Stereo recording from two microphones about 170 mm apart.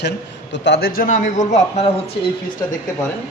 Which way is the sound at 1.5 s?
35° left (ahead or behind).